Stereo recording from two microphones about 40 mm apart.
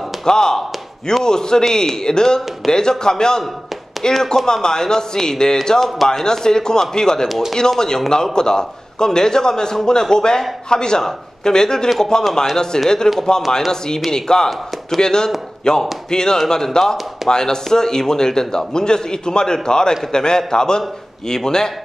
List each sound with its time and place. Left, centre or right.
0.2 s a sound: centre
1.2 s a man's voice: centre
2.7 s a man's voice: centre
5.8 s a man's voice: centre